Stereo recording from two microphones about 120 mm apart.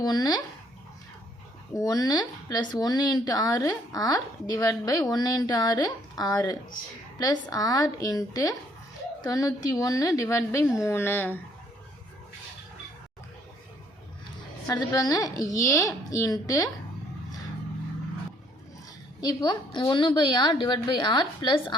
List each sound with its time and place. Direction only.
0.0 s speech: 35° left (ahead or behind)
1.7 s a woman's voice: 30° left (ahead or behind)
14.7 s a woman's voice: 30° left (ahead or behind)
19.2 s speech: 35° left (ahead or behind)